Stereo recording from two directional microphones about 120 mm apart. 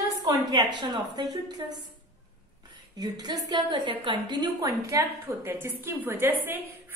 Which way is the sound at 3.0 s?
35° right (ahead or behind).